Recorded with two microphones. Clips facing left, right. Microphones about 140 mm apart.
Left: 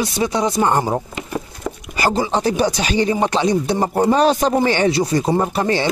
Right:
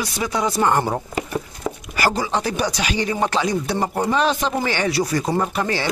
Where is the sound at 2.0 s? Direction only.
25° left (ahead or behind); by 4.7 s 40° left (ahead or behind).